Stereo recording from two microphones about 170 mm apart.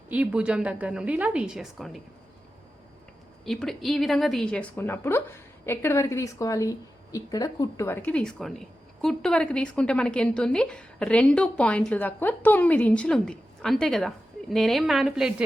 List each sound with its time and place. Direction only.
0.1 s a woman's voice: 5° right (ahead or behind)
3.4 s a woman's voice: centre (ahead or behind)